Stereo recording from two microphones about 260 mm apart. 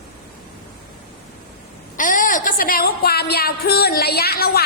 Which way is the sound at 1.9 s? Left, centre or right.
Left.